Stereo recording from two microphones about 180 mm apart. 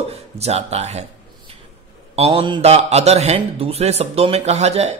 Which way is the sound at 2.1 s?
30° right (ahead or behind).